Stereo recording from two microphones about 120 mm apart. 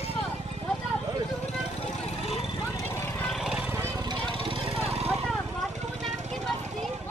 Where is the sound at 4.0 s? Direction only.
40° right (ahead or behind).